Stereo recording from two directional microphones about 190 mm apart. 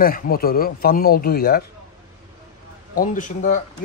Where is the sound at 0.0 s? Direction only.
50° left (ahead or behind).